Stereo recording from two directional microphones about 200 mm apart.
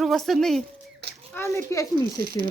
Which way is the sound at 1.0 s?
55° right (ahead or behind).